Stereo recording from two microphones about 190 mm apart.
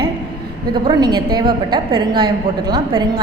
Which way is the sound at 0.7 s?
20° right (ahead or behind).